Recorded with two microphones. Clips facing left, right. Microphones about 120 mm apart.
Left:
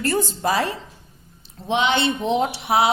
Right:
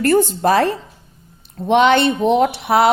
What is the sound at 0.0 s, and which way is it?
Speech, 60° right (ahead or behind).